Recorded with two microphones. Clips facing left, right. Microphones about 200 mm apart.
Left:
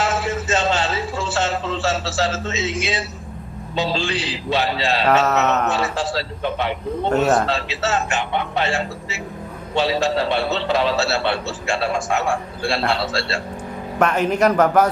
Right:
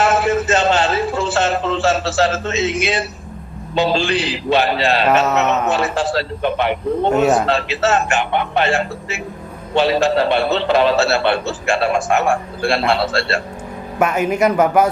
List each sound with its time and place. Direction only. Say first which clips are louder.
0.0 s a sound: right 6 dB; 60° right (ahead or behind)
3.8 s a man's voice: right 6 dB; 65° right (ahead or behind)
5.0 s a man's voice: left 1 dB; 5° right (ahead or behind)
5.7 s a man's voice: right 4 dB; 55° right (ahead or behind)
14.0 s a man's voice: right 1 dB; 10° right (ahead or behind)